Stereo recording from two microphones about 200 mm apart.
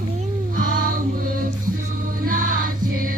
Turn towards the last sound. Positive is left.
turn(degrees=-45)  # may be behind; listen again after turning